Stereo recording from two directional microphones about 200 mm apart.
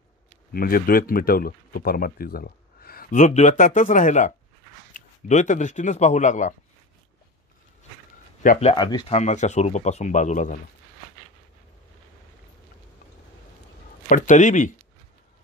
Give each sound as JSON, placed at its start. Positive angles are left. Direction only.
{"t": 0.5, "sound": "speech", "side_deg": 45}
{"t": 8.4, "sound": "speech", "side_deg": 35}
{"t": 9.2, "sound": "speech", "side_deg": 35}
{"t": 14.0, "sound": "speech", "side_deg": 40}